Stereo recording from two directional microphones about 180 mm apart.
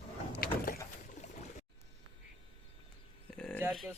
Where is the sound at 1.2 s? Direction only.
40° left (ahead or behind).